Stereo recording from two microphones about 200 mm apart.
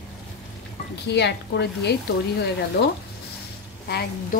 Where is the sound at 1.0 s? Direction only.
60° left (ahead or behind).